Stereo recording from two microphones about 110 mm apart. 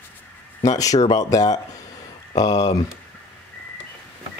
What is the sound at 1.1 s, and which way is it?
Speech, 35° left (ahead or behind).